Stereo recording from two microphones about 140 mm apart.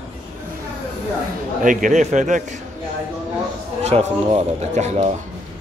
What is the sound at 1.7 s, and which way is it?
Speech, 65° right (ahead or behind).